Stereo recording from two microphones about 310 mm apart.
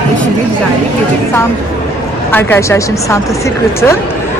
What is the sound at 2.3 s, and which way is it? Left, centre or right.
Speech, centre.